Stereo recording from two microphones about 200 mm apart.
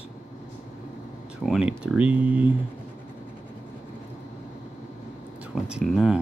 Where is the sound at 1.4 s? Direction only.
5° right (ahead or behind).